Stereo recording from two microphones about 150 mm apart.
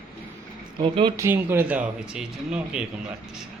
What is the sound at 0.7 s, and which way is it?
Speech, 35° right (ahead or behind).